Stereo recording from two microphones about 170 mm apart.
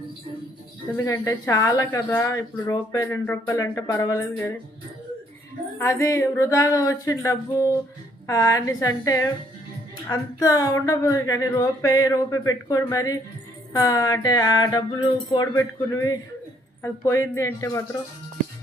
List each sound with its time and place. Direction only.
0.9 s speech: 20° left (ahead or behind)
5.8 s speech: 15° left (ahead or behind)